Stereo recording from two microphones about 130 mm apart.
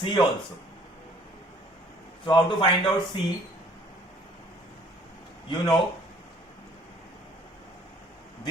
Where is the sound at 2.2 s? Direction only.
40° left (ahead or behind).